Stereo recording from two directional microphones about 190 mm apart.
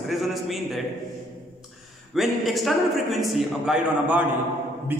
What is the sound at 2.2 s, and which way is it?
A man's voice, centre (ahead or behind).